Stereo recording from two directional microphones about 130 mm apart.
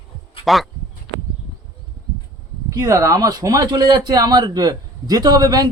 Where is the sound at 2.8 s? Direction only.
25° right (ahead or behind).